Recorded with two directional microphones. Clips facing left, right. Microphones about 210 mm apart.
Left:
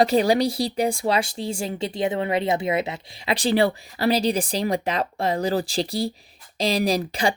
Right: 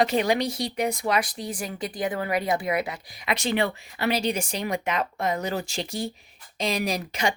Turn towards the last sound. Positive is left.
turn(degrees=35)  # may be behind; listen again after turning